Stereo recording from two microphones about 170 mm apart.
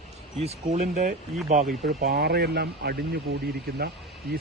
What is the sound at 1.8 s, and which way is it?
Speech, 70° right (ahead or behind).